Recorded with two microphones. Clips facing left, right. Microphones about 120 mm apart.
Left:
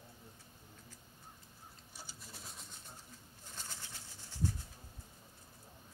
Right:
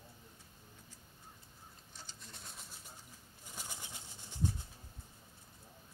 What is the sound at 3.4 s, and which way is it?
Pigeon, 10° right (ahead or behind).